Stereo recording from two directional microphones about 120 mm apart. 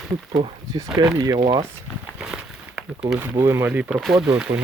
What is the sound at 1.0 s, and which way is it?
Speech, 35° right (ahead or behind).